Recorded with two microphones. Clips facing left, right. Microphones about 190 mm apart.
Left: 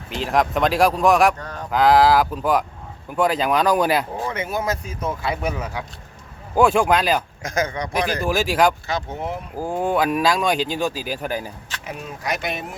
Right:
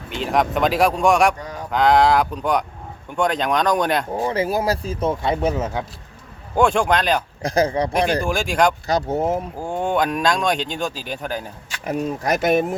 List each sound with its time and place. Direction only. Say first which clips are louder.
0.1 s speech: even; centre (ahead or behind)
1.4 s a sound: right 1 dB; 10° right (ahead or behind)
1.7 s speech: left 1 dB; 5° left (ahead or behind)
4.3 s speech: right 4 dB; 30° right (ahead or behind)
6.6 s speech: left 1 dB; 5° left (ahead or behind)
7.4 s speech: right 5 dB; 35° right (ahead or behind)
8.2 s speech: even; 5° left (ahead or behind)
8.9 s speech: right 7 dB; 40° right (ahead or behind)
9.6 s speech: left 5 dB; 5° left (ahead or behind)
11.9 s speech: right 7 dB; 40° right (ahead or behind)